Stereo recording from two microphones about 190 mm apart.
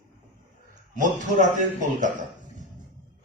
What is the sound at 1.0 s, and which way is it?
A man's voice, 40° right (ahead or behind).